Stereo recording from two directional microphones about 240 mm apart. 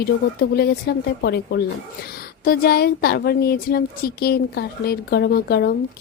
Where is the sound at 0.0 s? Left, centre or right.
Left.